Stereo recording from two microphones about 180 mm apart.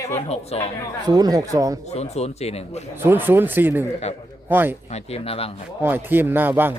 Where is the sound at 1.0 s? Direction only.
20° right (ahead or behind).